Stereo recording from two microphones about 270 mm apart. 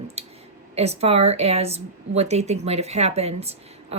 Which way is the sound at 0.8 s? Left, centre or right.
Right.